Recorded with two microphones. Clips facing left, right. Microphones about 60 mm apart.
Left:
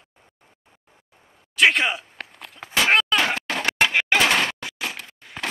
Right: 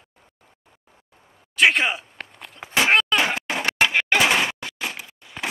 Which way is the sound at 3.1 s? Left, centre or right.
Centre.